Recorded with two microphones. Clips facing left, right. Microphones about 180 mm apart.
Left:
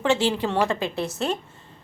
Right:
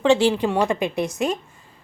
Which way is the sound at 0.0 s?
15° right (ahead or behind).